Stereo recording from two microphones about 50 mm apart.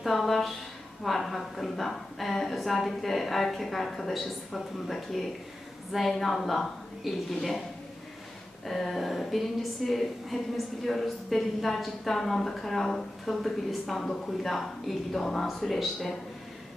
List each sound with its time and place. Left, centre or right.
0.0 s a woman's voice: centre
8.6 s a woman's voice: centre